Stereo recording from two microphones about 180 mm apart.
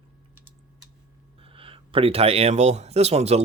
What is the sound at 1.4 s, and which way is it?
Speech, 30° right (ahead or behind).